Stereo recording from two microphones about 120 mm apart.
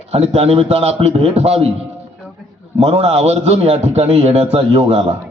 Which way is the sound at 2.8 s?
60° right (ahead or behind).